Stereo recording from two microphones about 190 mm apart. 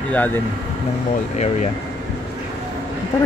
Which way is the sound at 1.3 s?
35° left (ahead or behind).